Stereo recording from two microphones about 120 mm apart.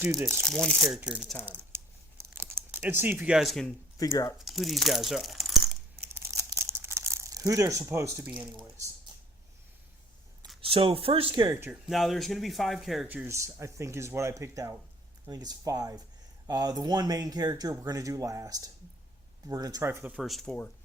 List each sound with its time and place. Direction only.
0.4 s speech: 5° left (ahead or behind)
1.5 s crumpling: 20° right (ahead or behind)
3.3 s speech: centre (ahead or behind)
3.9 s speech: 30° left (ahead or behind)
4.4 s speech: centre (ahead or behind)
6.0 s crumpling: 20° right (ahead or behind)
10.6 s speech: 50° right (ahead or behind)
11.7 s speech: centre (ahead or behind)
13.1 s speech: 20° right (ahead or behind)
20.1 s speech: centre (ahead or behind)